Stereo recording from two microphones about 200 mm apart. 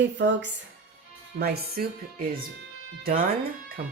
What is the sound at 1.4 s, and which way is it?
Speech, 50° right (ahead or behind).